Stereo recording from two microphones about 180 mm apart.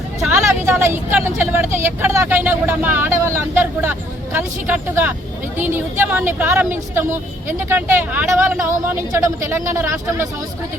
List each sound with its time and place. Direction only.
0.3 s speech: 15° right (ahead or behind)